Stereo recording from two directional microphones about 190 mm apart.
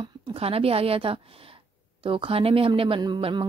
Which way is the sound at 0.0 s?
30° right (ahead or behind).